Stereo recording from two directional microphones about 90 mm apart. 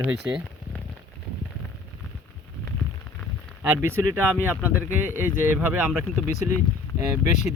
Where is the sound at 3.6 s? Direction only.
30° right (ahead or behind).